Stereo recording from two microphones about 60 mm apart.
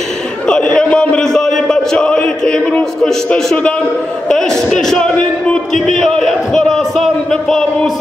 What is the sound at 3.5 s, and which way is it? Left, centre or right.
A man's voice, centre.